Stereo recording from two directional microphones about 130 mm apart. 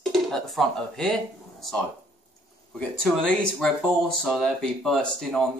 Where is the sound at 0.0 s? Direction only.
Centre (ahead or behind).